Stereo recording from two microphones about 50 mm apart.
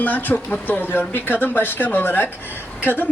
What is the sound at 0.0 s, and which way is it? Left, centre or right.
Speech, left.